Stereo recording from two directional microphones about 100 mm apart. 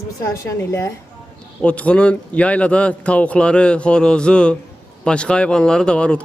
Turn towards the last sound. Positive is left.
turn(degrees=10)  # may be behind; listen again after turning